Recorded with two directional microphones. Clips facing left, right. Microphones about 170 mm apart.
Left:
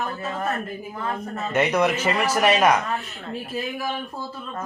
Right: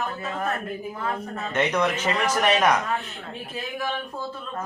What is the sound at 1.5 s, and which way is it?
Speech, 10° left (ahead or behind).